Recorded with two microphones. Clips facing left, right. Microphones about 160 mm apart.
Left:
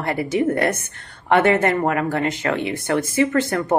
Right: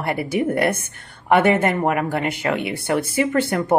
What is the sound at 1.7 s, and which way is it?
Speech, 15° right (ahead or behind).